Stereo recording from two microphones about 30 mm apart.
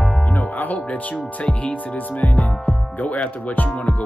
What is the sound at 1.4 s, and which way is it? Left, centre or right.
Speech, left.